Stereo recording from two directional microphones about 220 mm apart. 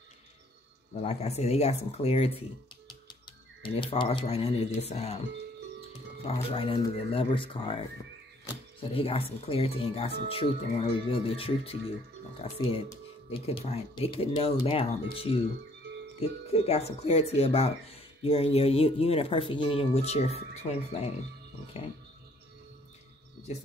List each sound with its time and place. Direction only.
1.0 s speech: 30° left (ahead or behind)
3.6 s speech: 25° left (ahead or behind)
6.2 s speech: 25° left (ahead or behind)